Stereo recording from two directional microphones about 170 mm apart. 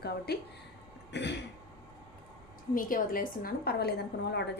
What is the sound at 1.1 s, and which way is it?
Throat clearing, 90° left.